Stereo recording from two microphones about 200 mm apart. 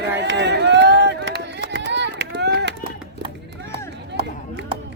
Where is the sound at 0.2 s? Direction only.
60° right (ahead or behind).